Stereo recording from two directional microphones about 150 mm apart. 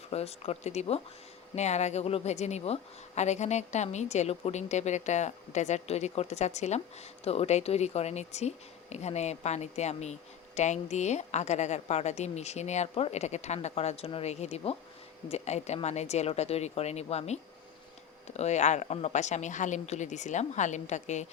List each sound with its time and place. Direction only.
0.1 s a woman's voice: 45° left (ahead or behind)